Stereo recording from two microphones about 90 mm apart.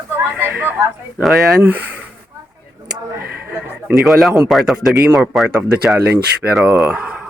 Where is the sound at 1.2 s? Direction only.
Centre (ahead or behind).